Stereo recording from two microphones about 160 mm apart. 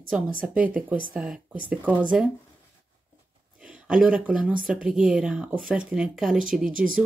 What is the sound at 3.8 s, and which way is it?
Speech, 10° right (ahead or behind).